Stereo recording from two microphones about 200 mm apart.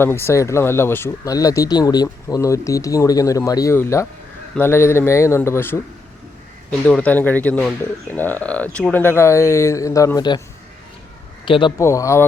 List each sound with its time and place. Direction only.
0.0 s speech: 10° left (ahead or behind)
11.4 s a man's voice: 25° left (ahead or behind)
11.8 s speech: 15° left (ahead or behind)